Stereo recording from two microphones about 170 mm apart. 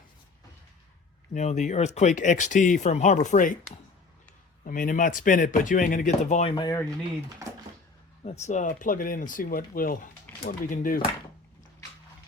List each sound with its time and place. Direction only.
1.3 s speech: 45° left (ahead or behind)
6.6 s speech: 20° left (ahead or behind)
8.2 s speech: 40° left (ahead or behind)